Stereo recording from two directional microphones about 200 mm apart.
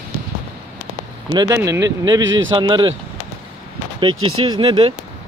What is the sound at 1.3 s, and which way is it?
Speech, 20° right (ahead or behind).